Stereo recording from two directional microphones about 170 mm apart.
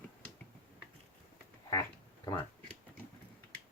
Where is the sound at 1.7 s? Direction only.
20° left (ahead or behind).